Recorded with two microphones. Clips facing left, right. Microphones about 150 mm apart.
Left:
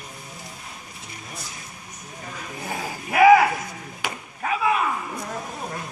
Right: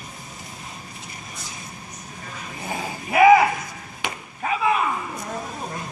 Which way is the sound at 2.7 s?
Centre (ahead or behind).